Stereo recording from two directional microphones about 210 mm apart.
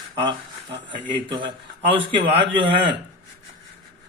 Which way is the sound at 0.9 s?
20° right (ahead or behind).